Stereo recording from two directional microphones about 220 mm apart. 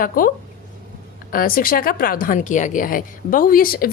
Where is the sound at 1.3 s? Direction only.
40° left (ahead or behind).